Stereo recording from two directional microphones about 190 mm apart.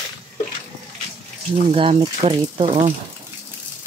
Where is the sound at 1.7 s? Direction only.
30° right (ahead or behind).